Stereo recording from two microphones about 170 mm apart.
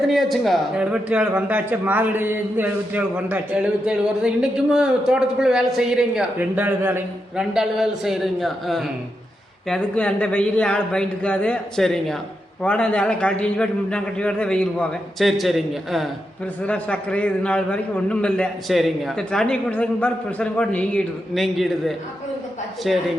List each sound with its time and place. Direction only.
0.1 s a man's voice: centre (ahead or behind)